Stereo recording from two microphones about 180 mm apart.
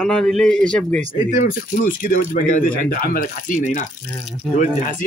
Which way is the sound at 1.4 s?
50° left (ahead or behind).